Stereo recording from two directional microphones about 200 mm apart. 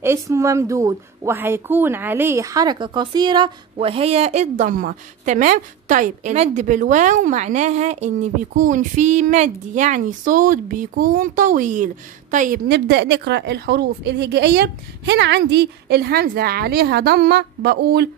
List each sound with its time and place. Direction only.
0.0 s speech: 15° right (ahead or behind); by 18.0 s 55° right (ahead or behind)